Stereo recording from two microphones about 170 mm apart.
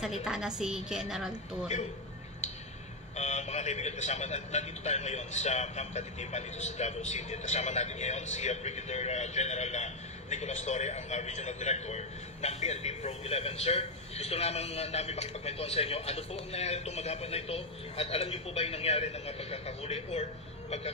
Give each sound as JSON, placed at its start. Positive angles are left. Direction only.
{"t": 0.0, "sound": "a woman's voice", "side_deg": -5}
{"t": 3.2, "sound": "a man's voice", "side_deg": 40}